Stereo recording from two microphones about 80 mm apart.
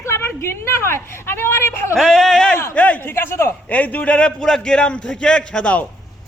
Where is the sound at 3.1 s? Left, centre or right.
Left.